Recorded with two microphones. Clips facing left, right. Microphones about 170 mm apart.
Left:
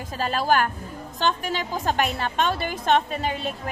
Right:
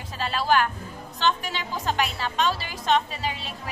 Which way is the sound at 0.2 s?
45° left (ahead or behind).